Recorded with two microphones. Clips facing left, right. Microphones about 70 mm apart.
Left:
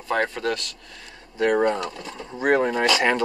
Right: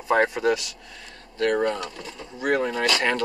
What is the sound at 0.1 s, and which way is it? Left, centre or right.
Speech, centre.